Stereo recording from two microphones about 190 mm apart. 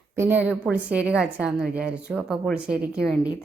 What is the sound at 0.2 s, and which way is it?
A woman's voice, 10° right (ahead or behind).